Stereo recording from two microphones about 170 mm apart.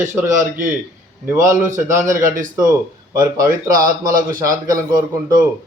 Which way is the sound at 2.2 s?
55° right (ahead or behind).